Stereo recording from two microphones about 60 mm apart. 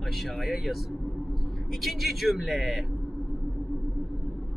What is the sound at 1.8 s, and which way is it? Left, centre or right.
A man's voice, centre.